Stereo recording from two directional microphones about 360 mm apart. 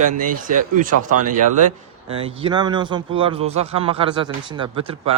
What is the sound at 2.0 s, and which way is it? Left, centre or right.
Speech, centre.